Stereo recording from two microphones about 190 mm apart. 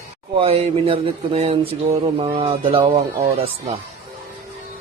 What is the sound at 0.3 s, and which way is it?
Speech, 35° right (ahead or behind).